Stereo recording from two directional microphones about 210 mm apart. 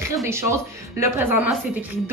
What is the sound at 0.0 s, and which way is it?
A woman's voice, 15° right (ahead or behind).